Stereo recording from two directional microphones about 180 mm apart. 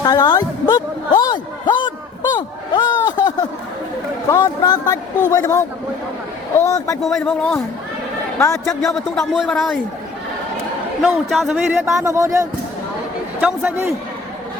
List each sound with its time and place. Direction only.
0.0 s a sound: 20° left (ahead or behind)
4.3 s a man's voice: 20° left (ahead or behind)
6.7 s speech: 20° left (ahead or behind)
7.0 s a man's voice: centre (ahead or behind)
8.4 s a man's voice: 15° left (ahead or behind)
8.8 s a man's voice: centre (ahead or behind)
11.0 s a man's voice: centre (ahead or behind)
11.9 s speech: 15° right (ahead or behind)